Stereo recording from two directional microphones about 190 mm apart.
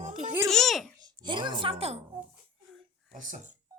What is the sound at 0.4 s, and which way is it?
Babbling, centre (ahead or behind).